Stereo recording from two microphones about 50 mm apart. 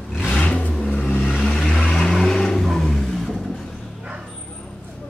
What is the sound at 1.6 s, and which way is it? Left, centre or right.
Vehicle, centre.